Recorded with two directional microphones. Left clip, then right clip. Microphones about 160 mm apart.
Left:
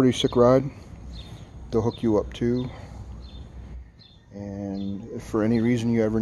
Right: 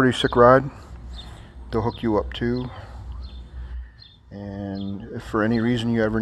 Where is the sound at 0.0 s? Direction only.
15° left (ahead or behind).